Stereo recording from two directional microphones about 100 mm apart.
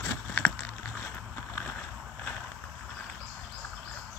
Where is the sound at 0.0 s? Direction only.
20° left (ahead or behind).